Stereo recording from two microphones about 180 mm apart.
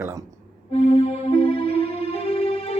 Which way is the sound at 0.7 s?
35° left (ahead or behind).